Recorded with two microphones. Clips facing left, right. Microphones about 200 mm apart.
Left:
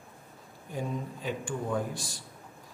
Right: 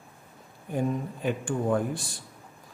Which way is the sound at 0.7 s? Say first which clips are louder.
Right 6 dB; 55° right (ahead or behind).